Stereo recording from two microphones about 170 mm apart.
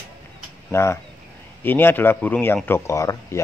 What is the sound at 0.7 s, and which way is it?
Speech, 15° left (ahead or behind).